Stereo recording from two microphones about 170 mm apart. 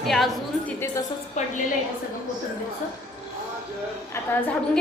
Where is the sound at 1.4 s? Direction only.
45° left (ahead or behind).